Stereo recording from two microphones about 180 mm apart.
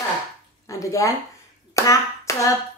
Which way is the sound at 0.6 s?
15° left (ahead or behind).